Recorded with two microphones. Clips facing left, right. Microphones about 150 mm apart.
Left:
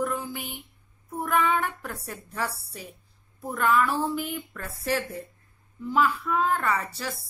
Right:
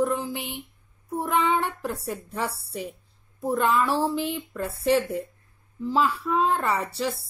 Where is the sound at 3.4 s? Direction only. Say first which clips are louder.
Right 1 dB; 25° right (ahead or behind).